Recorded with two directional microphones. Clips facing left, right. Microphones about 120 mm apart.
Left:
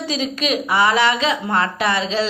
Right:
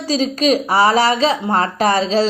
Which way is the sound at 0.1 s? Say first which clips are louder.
Right 7 dB; 40° right (ahead or behind).